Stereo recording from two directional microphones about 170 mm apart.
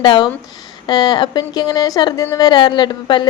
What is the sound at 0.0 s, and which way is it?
A woman's voice, 25° left (ahead or behind).